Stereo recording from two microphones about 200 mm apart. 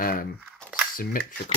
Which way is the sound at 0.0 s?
45° left (ahead or behind).